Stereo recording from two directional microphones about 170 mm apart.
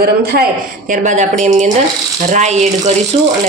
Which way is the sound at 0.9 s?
45° right (ahead or behind).